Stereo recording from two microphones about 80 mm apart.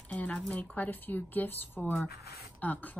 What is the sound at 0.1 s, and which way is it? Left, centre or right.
Speech, centre.